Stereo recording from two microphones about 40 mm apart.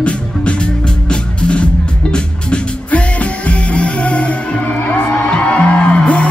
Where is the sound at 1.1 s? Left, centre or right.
Left.